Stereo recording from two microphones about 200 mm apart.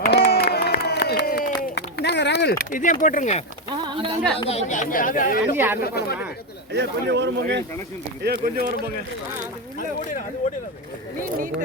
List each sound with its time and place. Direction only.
0.0 s a sound: 50° left (ahead or behind); by 3.4 s 35° left (ahead or behind)
3.8 s a sound: 25° right (ahead or behind)
4.4 s speech: 30° left (ahead or behind)
5.5 s speech: 10° right (ahead or behind)
5.8 s speech: 50° left (ahead or behind)
6.7 s speech: 60° right (ahead or behind)